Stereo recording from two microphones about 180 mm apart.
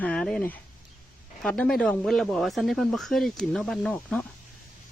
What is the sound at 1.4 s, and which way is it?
Speech, 5° left (ahead or behind).